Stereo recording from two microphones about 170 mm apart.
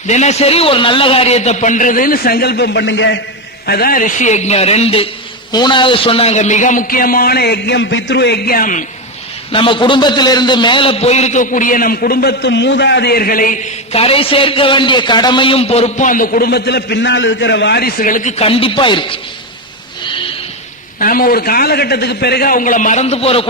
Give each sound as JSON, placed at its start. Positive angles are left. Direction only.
{"t": 0.1, "sound": "a man's voice", "side_deg": 40}
{"t": 3.7, "sound": "a man's voice", "side_deg": 60}
{"t": 5.5, "sound": "a man's voice", "side_deg": 25}
{"t": 9.5, "sound": "a man's voice", "side_deg": 30}
{"t": 13.9, "sound": "a man's voice", "side_deg": 35}
{"t": 21.0, "sound": "a man's voice", "side_deg": 55}